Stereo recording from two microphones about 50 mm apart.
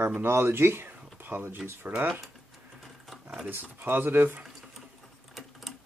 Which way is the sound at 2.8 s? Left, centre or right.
Centre.